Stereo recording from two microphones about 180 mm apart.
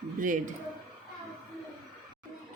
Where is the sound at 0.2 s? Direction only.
45° right (ahead or behind).